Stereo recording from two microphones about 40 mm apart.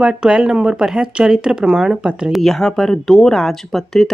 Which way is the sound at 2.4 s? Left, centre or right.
Centre.